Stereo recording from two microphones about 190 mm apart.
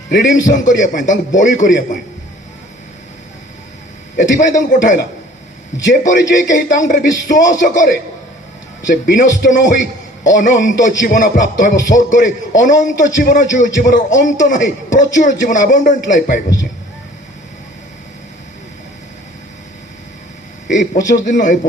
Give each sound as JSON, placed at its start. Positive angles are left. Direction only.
{"t": 0.4, "sound": "speech", "side_deg": 40}
{"t": 4.2, "sound": "a man's voice", "side_deg": 40}
{"t": 6.1, "sound": "a man's voice", "side_deg": 40}
{"t": 20.7, "sound": "a man's voice", "side_deg": 40}